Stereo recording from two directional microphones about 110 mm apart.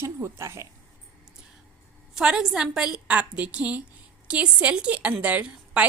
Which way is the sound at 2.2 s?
5° right (ahead or behind).